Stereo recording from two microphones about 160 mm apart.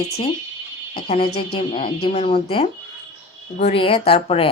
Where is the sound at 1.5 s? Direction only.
30° left (ahead or behind).